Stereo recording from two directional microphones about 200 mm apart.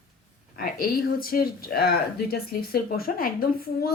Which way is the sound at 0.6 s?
50° left (ahead or behind).